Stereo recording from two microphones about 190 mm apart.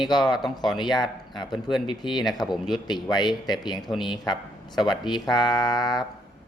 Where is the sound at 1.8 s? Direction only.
25° left (ahead or behind).